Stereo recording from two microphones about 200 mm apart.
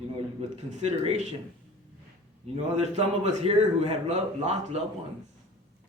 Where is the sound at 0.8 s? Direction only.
35° right (ahead or behind).